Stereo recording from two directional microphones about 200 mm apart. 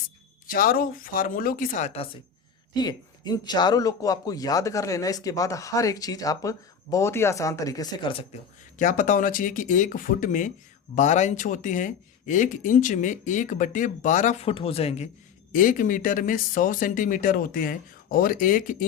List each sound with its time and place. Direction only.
0.4 s speech: 45° left (ahead or behind)
2.7 s speech: 20° left (ahead or behind)
8.8 s speech: 40° left (ahead or behind)
15.5 s speech: 40° left (ahead or behind)